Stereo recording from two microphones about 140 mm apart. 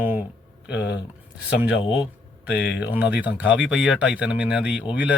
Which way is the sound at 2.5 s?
10° right (ahead or behind).